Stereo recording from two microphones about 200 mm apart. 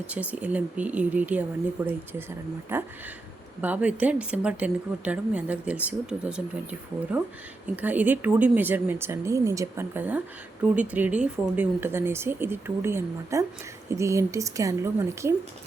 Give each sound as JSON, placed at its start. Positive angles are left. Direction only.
{"t": 0.1, "sound": "speech", "side_deg": -5}